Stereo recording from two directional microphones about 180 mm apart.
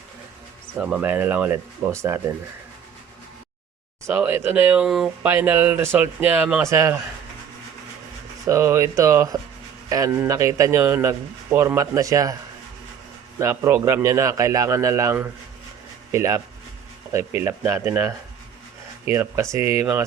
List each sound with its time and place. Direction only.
0.8 s a man's voice: 10° right (ahead or behind)
4.0 s a man's voice: 10° right (ahead or behind)
8.4 s a man's voice: 15° right (ahead or behind)
13.4 s a man's voice: 15° right (ahead or behind)